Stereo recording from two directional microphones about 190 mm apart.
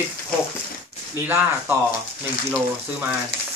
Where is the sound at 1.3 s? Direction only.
10° right (ahead or behind).